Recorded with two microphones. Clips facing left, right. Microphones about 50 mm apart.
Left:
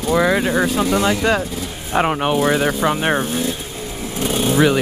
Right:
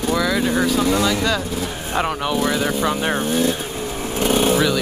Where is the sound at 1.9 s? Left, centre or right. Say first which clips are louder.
Left 4 dB; left.